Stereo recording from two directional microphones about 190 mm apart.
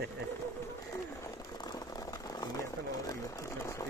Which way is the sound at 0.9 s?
15° left (ahead or behind).